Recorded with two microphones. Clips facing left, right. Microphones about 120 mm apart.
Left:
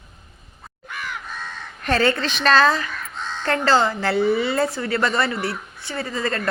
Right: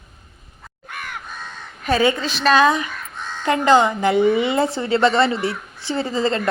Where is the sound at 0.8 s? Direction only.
50° right (ahead or behind).